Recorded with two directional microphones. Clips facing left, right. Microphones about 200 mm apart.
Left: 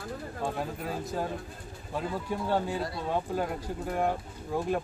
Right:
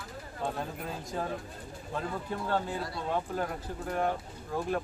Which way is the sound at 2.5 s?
15° left (ahead or behind).